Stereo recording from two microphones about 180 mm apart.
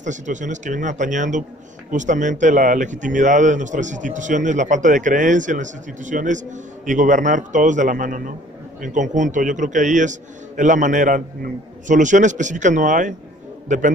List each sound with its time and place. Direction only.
0.0 s speech: 45° right (ahead or behind)